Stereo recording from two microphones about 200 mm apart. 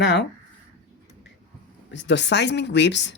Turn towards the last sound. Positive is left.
turn(degrees=60)  # may be behind; listen again after turning